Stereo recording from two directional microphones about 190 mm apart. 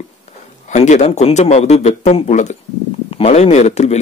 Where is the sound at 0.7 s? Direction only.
40° left (ahead or behind).